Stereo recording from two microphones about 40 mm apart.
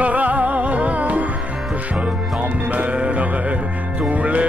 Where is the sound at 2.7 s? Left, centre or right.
Right.